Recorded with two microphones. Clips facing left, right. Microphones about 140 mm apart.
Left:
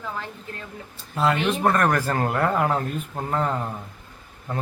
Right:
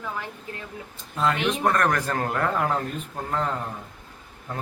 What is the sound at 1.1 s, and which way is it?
A man's voice, 5° left (ahead or behind).